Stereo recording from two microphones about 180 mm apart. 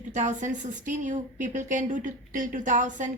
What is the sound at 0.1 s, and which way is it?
A woman's voice, 45° right (ahead or behind).